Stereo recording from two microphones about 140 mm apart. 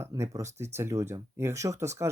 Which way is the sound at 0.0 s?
20° right (ahead or behind).